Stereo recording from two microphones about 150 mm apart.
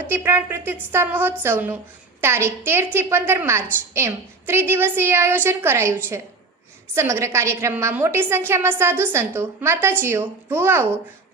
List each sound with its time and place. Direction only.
0.1 s a woman's voice: 15° right (ahead or behind)